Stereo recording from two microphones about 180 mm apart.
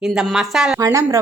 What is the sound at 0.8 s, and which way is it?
Speech, 15° right (ahead or behind).